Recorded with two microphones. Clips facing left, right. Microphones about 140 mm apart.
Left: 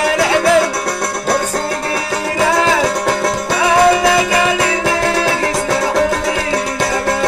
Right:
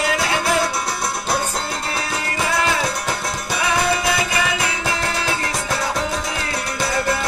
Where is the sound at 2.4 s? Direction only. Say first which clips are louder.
Left 7 dB; 90° left.